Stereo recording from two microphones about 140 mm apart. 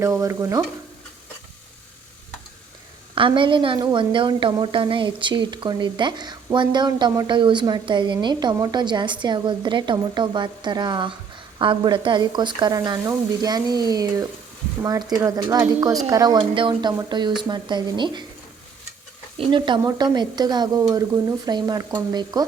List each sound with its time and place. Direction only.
0.0 s speech: 20° right (ahead or behind)
3.2 s a woman's voice: 35° right (ahead or behind)
19.4 s a woman's voice: 35° right (ahead or behind)